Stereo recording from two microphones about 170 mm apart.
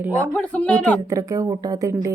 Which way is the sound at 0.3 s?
10° left (ahead or behind).